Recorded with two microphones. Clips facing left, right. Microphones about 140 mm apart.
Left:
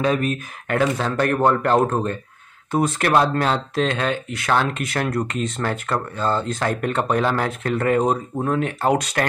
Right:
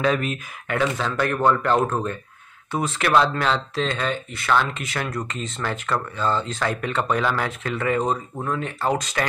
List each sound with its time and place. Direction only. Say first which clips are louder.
0.0 s speech: left 2 dB; 35° left (ahead or behind); by 9.2 s 60° left (ahead or behind)